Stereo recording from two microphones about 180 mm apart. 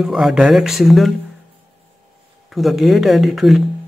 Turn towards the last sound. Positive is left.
turn(degrees=0)  # may be behind; listen again after turning